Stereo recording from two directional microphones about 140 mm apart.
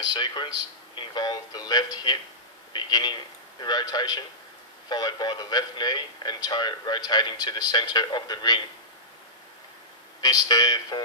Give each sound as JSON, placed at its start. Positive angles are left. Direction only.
{"t": 0.0, "sound": "speech", "side_deg": 35}
{"t": 10.2, "sound": "speech", "side_deg": 25}